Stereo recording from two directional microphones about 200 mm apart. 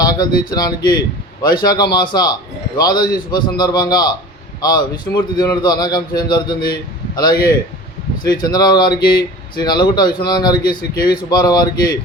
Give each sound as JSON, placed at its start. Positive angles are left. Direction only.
{"t": 0.0, "sound": "a man's voice", "side_deg": 20}